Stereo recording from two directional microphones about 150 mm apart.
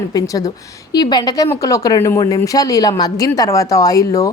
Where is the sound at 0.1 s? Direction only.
25° left (ahead or behind).